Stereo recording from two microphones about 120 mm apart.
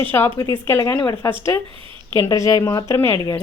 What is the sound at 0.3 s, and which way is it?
A woman's voice, 30° left (ahead or behind).